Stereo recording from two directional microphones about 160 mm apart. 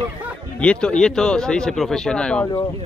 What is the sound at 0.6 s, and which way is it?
Speech, 5° left (ahead or behind).